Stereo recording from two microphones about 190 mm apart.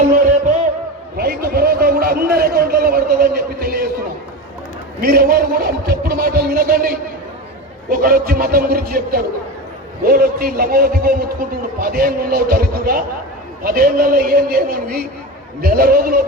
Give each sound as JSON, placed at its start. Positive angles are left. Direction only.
{"t": 1.1, "sound": "a man's voice", "side_deg": -55}
{"t": 4.9, "sound": "a man's voice", "side_deg": -50}